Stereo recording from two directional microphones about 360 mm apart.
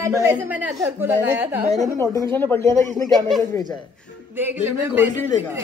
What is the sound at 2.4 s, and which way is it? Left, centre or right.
Speech, centre.